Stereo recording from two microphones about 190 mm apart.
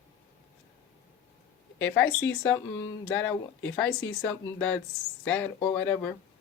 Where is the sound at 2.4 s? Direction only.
15° left (ahead or behind).